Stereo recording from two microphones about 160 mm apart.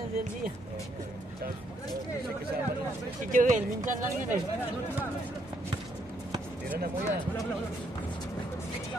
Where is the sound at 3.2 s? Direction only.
55° right (ahead or behind).